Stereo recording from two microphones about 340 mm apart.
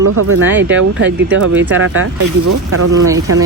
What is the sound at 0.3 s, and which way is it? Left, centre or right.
Speech, right.